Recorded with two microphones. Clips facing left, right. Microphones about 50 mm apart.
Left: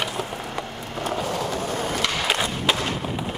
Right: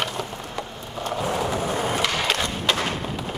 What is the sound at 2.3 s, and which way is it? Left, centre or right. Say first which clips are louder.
Skateboard: left 1 dB; centre.